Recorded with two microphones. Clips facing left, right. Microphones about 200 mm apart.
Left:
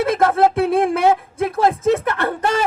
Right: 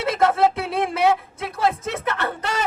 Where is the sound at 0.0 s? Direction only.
50° left (ahead or behind).